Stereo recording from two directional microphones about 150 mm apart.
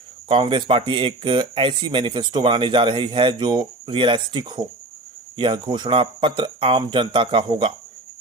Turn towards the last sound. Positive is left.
turn(degrees=-35)  # may be behind; listen again after turning